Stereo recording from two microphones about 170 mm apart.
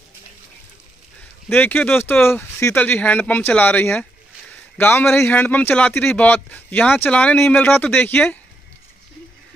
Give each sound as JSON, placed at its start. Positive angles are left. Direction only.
{"t": 1.5, "sound": "speech", "side_deg": 10}